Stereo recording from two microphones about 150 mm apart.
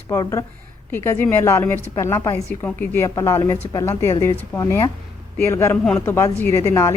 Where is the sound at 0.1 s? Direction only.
20° left (ahead or behind).